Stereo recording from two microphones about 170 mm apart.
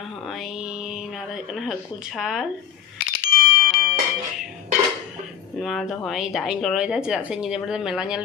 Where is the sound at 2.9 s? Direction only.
60° left (ahead or behind).